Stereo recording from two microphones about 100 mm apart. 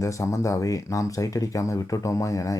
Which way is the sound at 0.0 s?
30° left (ahead or behind).